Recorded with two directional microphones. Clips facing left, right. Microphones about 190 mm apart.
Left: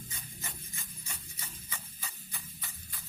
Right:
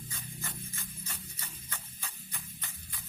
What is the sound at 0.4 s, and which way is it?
Music, 15° left (ahead or behind).